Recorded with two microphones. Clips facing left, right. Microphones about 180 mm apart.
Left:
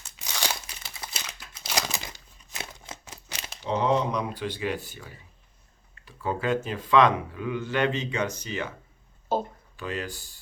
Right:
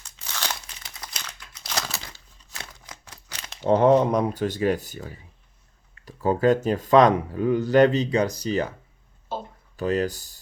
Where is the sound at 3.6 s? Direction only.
50° right (ahead or behind).